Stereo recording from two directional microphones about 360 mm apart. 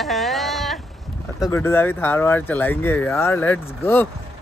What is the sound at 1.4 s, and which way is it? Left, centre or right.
Speech, centre.